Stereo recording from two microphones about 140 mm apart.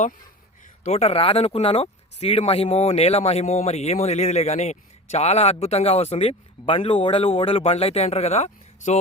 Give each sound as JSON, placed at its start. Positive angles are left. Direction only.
{"t": 0.9, "sound": "speech", "side_deg": 50}